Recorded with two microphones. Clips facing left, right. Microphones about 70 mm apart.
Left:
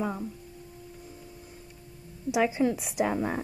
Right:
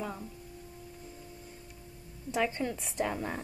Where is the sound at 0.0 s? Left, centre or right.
Centre.